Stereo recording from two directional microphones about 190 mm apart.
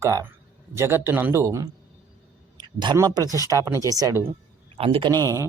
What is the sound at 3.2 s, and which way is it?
Speech, 20° left (ahead or behind).